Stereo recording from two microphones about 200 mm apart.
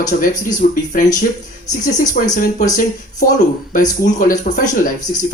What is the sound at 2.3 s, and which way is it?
Speech, 40° left (ahead or behind).